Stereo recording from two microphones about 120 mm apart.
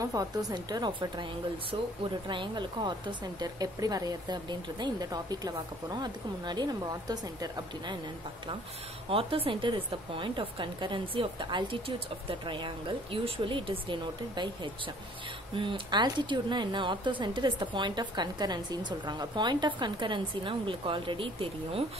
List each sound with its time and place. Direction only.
0.0 s speech: 30° right (ahead or behind)
9.1 s speech: 50° right (ahead or behind)